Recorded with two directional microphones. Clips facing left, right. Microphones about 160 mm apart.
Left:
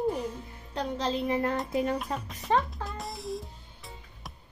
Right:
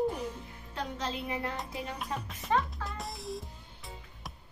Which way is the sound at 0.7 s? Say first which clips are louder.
Left 6 dB; 35° left (ahead or behind).